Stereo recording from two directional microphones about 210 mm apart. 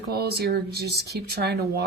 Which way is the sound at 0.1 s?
50° right (ahead or behind).